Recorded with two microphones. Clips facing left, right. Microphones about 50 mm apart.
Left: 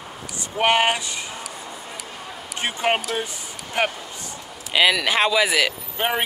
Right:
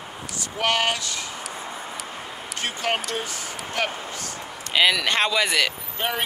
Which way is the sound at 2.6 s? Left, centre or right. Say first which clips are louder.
Left 4 dB; left.